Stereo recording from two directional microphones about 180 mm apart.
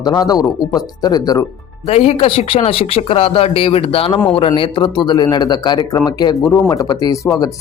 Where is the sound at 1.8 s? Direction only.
35° left (ahead or behind).